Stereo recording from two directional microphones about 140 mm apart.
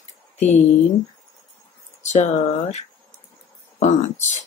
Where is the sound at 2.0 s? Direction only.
55° left (ahead or behind).